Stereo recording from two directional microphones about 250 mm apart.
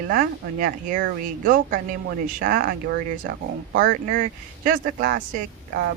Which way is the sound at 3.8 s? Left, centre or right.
Right.